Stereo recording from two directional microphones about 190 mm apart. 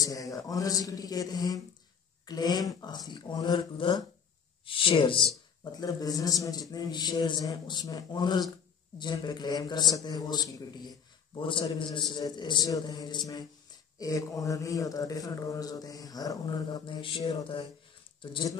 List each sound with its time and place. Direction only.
0.0 s a man's voice: 20° left (ahead or behind)